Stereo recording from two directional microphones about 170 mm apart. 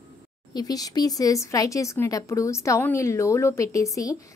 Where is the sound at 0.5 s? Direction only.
25° left (ahead or behind).